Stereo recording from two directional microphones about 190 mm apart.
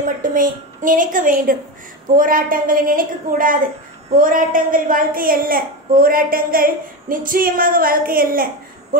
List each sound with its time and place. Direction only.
0.0 s a woman's voice: 45° right (ahead or behind)